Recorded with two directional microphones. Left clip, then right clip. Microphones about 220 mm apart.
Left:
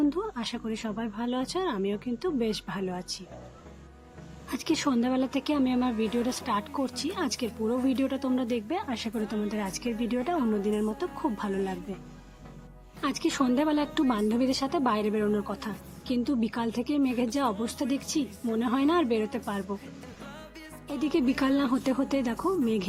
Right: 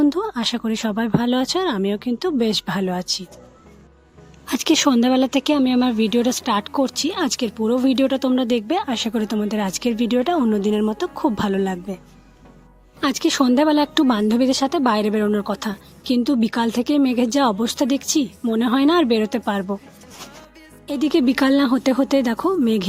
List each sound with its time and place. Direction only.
0.0 s speech: 40° right (ahead or behind)
4.4 s speech: 40° right (ahead or behind)
13.0 s speech: 40° right (ahead or behind)
20.9 s speech: 40° right (ahead or behind)